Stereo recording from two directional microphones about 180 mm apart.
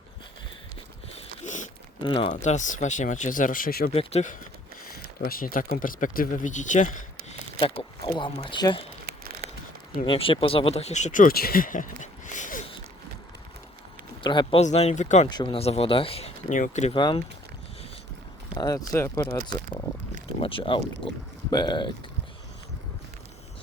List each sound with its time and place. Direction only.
1.5 s a sound: 45° left (ahead or behind)
2.0 s speech: 30° left (ahead or behind); by 3.9 s 55° left (ahead or behind)
3.9 s speech: 40° left (ahead or behind)
5.2 s speech: 55° left (ahead or behind)
7.8 s speech: 25° left (ahead or behind)
10.1 s speech: 30° left (ahead or behind)
14.2 s speech: 25° left (ahead or behind)
14.6 s speech: 40° left (ahead or behind)
15.3 s speech: 25° left (ahead or behind)
16.9 s speech: 25° left (ahead or behind)
18.5 s speech: 20° left (ahead or behind)